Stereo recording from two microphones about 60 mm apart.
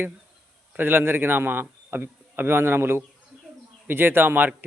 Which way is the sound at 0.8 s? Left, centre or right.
Right.